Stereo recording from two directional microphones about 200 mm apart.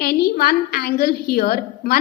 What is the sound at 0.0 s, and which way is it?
A woman's voice, 50° left (ahead or behind).